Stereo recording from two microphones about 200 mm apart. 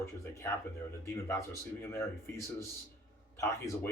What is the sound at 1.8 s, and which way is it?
Speech, 15° left (ahead or behind).